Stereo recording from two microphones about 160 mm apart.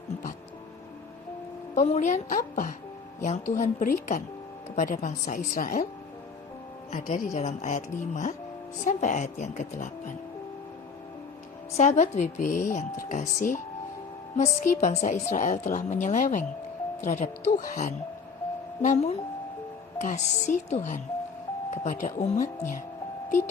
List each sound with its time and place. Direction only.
1.7 s a woman's voice: 45° left (ahead or behind)
6.9 s a woman's voice: 55° left (ahead or behind)
11.8 s a woman's voice: 50° left (ahead or behind)
18.8 s a woman's voice: 50° left (ahead or behind)